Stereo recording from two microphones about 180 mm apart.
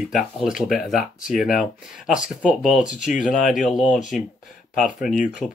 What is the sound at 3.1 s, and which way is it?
Speech, 45° left (ahead or behind).